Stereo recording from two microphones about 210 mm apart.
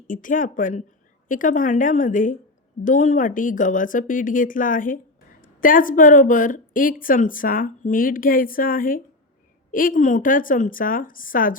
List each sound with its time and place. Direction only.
0.1 s a woman's voice: 40° left (ahead or behind)